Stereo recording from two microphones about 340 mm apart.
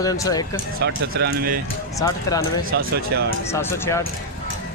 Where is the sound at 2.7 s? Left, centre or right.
Right.